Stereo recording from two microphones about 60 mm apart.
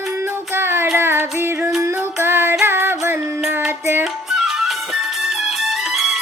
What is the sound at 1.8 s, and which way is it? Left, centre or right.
Child singing, right.